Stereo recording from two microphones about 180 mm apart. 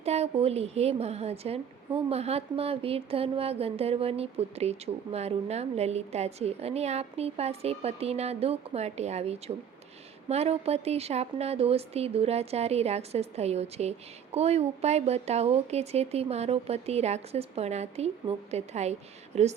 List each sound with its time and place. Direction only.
0.0 s a woman's voice: 35° right (ahead or behind)